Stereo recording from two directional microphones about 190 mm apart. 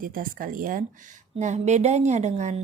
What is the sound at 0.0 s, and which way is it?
A woman's voice, 45° right (ahead or behind).